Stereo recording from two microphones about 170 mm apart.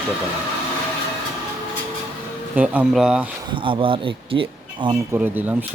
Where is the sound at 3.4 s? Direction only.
30° right (ahead or behind).